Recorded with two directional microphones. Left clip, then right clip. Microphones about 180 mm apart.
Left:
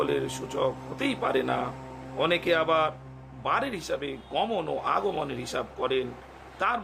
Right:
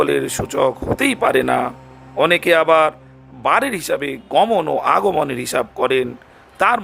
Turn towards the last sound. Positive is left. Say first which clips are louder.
# right 12 dB
turn(degrees=-50)  # may be behind; listen again after turning